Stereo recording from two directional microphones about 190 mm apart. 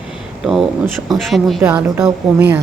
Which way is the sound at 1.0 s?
Centre (ahead or behind).